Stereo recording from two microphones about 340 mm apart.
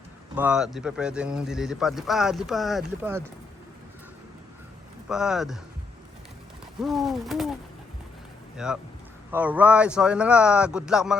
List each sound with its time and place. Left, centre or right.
0.3 s speech: centre
5.0 s speech: centre
6.8 s speech: centre
8.5 s speech: centre